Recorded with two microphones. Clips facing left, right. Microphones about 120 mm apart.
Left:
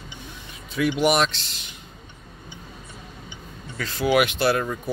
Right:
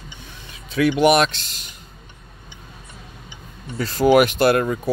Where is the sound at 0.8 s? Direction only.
65° right (ahead or behind); by 1.7 s 45° right (ahead or behind).